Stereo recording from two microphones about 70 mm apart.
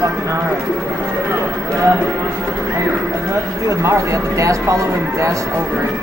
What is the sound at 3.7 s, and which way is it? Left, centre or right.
Speech, right.